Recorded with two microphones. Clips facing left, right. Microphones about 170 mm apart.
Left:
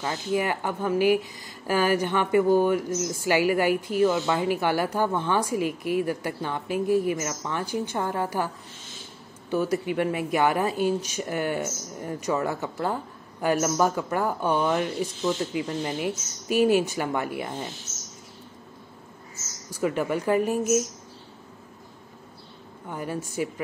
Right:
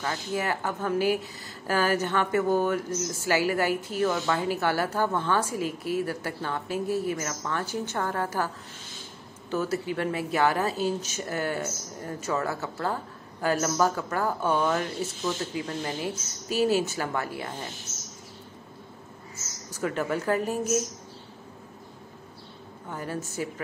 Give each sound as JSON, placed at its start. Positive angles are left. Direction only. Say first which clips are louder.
{"t": 0.0, "sound": "speech", "louder": "left 3 dB", "side_deg": 15}
{"t": 9.5, "sound": "speech", "louder": "left 3 dB", "side_deg": 15}
{"t": 19.7, "sound": "speech", "louder": "left 3 dB", "side_deg": 10}
{"t": 22.8, "sound": "speech", "louder": "left 2 dB", "side_deg": 15}